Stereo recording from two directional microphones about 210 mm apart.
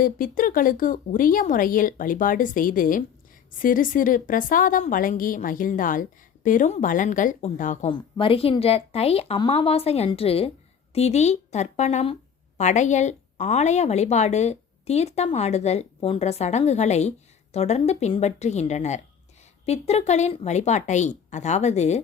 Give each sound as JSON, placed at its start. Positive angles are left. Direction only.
{"t": 0.0, "sound": "a woman's voice", "side_deg": 40}